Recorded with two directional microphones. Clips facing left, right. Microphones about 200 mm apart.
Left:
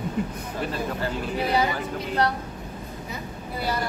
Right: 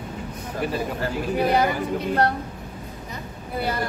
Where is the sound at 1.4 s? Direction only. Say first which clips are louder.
Right 2 dB; 55° right (ahead or behind).